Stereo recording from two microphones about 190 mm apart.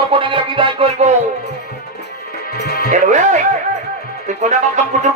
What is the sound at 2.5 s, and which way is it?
Music, 55° left (ahead or behind).